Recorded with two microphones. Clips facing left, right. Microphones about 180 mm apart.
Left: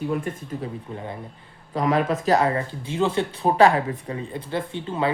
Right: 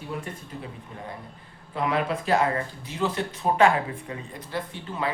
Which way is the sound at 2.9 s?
25° left (ahead or behind).